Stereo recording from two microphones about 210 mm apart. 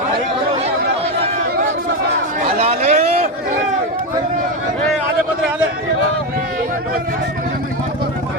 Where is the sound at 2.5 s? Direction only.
30° right (ahead or behind).